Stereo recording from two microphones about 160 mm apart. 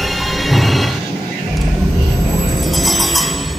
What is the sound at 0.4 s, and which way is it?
Music, centre (ahead or behind).